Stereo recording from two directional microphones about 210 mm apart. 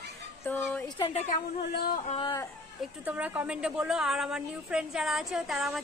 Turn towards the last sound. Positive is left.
turn(degrees=0)  # may be behind; listen again after turning